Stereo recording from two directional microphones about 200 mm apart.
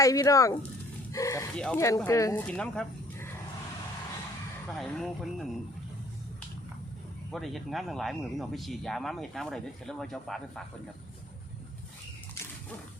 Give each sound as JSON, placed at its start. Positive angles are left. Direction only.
{"t": 0.0, "sound": "speech", "side_deg": 15}
{"t": 1.5, "sound": "speech", "side_deg": 5}
{"t": 2.6, "sound": "speech", "side_deg": 5}
{"t": 4.7, "sound": "speech", "side_deg": 0}
{"t": 7.3, "sound": "speech", "side_deg": 0}